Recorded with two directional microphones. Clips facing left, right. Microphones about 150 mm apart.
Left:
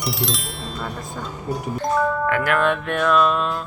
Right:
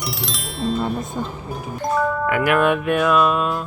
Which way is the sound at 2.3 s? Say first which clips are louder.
Right 6 dB; 10° right (ahead or behind).